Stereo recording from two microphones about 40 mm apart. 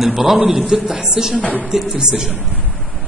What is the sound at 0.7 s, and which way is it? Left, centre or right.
Speech, centre.